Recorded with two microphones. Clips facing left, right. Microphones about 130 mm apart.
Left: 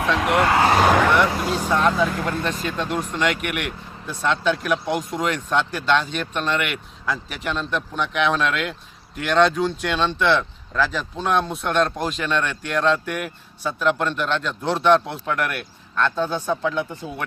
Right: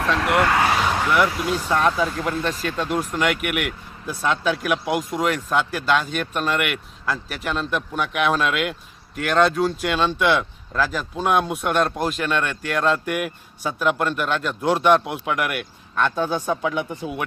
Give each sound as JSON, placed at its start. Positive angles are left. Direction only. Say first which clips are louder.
{"t": 0.4, "sound": "speech", "louder": "left 2 dB", "side_deg": 25}
{"t": 1.4, "sound": "speech", "louder": "even", "side_deg": 0}